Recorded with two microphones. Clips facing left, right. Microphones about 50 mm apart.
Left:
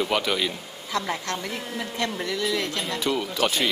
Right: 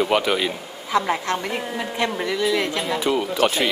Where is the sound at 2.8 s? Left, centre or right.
Centre.